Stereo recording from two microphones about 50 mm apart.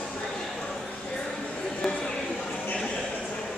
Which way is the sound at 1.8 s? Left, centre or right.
Centre.